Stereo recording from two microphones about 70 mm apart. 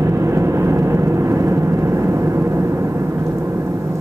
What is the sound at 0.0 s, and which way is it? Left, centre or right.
Vehicle, right.